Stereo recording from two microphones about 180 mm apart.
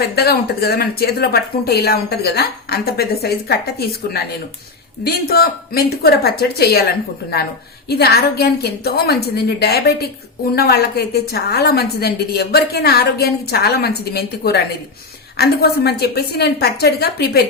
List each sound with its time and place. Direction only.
0.0 s a woman's voice: 60° left (ahead or behind)